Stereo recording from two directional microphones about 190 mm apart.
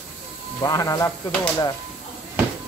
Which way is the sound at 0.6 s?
20° left (ahead or behind).